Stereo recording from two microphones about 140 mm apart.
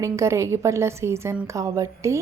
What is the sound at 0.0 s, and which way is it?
Speech, 20° right (ahead or behind).